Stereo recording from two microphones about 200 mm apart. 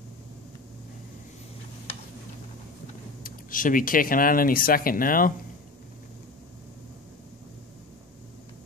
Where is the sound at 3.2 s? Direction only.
45° left (ahead or behind).